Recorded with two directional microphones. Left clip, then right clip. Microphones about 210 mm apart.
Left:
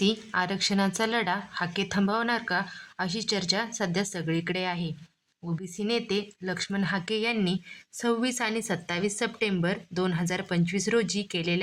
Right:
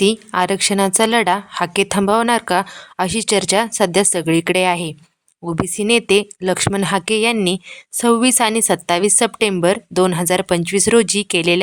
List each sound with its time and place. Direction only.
0.0 s a woman's voice: 40° right (ahead or behind)